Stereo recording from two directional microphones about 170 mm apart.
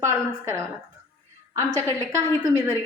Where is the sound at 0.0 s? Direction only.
15° right (ahead or behind).